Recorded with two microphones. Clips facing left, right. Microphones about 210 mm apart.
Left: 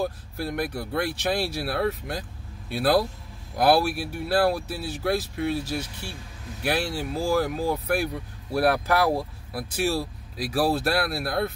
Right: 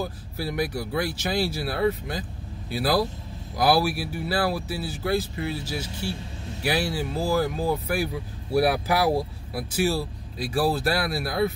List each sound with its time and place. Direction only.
0.4 s speech: 5° right (ahead or behind)
6.0 s a man's voice: 25° right (ahead or behind)
6.6 s speech: centre (ahead or behind)